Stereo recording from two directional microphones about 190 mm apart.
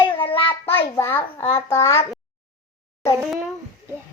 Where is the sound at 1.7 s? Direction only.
15° left (ahead or behind).